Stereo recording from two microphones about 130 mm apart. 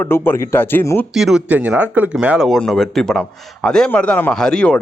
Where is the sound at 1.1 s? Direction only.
Centre (ahead or behind).